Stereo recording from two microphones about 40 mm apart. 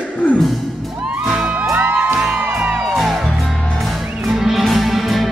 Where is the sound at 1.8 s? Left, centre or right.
Right.